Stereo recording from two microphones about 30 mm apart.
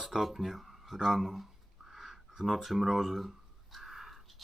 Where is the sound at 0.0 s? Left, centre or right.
Centre.